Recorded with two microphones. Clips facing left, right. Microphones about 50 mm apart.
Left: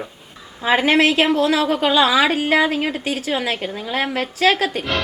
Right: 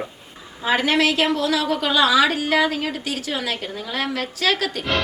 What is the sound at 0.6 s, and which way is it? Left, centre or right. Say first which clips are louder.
A woman's voice: left 3 dB; left.